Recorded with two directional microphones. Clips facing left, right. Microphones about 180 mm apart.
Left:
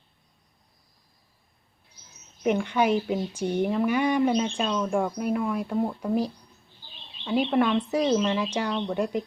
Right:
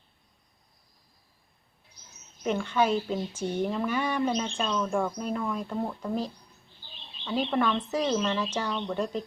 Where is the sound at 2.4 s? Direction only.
15° left (ahead or behind).